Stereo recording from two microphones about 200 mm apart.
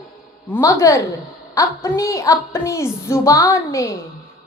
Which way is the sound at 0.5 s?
15° left (ahead or behind).